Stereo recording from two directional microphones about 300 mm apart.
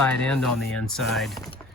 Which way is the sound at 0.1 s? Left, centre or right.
Centre.